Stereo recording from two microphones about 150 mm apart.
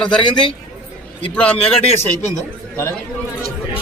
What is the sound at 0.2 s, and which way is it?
Speech, 30° left (ahead or behind).